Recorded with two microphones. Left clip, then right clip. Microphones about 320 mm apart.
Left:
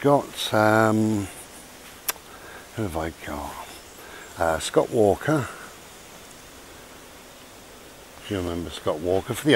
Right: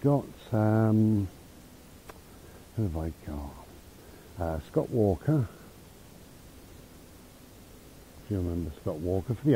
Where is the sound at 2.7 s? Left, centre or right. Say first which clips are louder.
Left 7 dB; centre.